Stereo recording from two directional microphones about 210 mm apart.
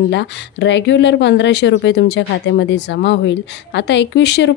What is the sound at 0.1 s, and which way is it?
Speech, 55° left (ahead or behind).